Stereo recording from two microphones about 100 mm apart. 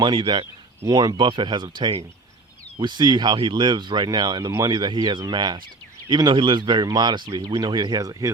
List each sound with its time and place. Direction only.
0.0 s speech: 50° right (ahead or behind)
0.9 s speech: 40° right (ahead or behind)